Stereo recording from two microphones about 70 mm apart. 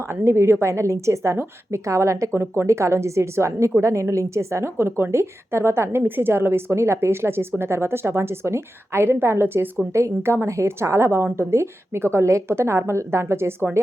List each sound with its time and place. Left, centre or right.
0.3 s a woman's voice: right